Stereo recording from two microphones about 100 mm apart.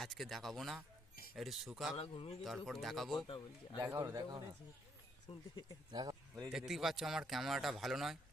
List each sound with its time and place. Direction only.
0.0 s speech: centre (ahead or behind)
2.0 s speech: 70° left (ahead or behind)
2.4 s speech: centre (ahead or behind)
3.2 s a man's voice: 55° left (ahead or behind)
3.8 s speech: 30° right (ahead or behind)
5.3 s speech: 60° left (ahead or behind)
5.9 s speech: 40° right (ahead or behind)
6.5 s speech: 5° right (ahead or behind)